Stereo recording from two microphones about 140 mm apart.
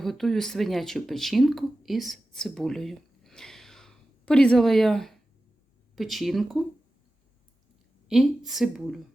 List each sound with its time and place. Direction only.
0.0 s a woman's voice: centre (ahead or behind)
8.0 s a woman's voice: centre (ahead or behind)